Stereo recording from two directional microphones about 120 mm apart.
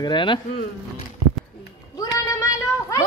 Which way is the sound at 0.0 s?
40° left (ahead or behind).